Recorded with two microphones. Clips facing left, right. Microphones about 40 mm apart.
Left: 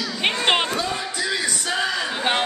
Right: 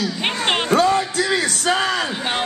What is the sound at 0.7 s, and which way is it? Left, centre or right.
Music, right.